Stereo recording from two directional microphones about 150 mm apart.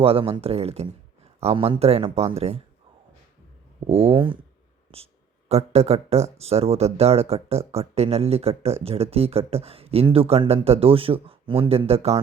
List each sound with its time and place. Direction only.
0.0 s speech: 40° right (ahead or behind)
3.8 s speech: 40° right (ahead or behind)
5.5 s speech: 45° right (ahead or behind)